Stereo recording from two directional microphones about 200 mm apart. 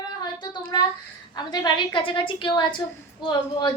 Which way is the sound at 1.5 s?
20° left (ahead or behind).